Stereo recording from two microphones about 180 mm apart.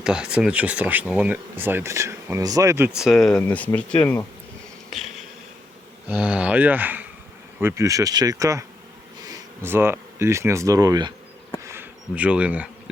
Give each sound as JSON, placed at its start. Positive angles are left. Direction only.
{"t": 0.0, "sound": "speech", "side_deg": -5}
{"t": 4.9, "sound": "insect", "side_deg": 0}
{"t": 6.1, "sound": "speech", "side_deg": -5}
{"t": 11.6, "sound": "a sound", "side_deg": -10}